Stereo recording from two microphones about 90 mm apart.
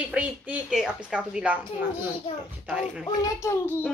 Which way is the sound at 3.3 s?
30° left (ahead or behind).